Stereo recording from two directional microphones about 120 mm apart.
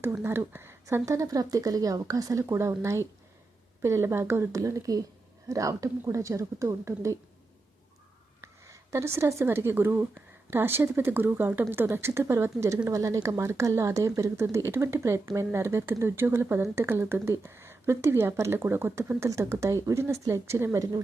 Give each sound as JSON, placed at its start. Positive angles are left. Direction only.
{"t": 0.0, "sound": "speech", "side_deg": -20}
{"t": 8.4, "sound": "a woman's voice", "side_deg": -25}